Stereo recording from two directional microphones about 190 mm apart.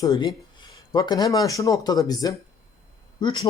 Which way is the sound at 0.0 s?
20° left (ahead or behind).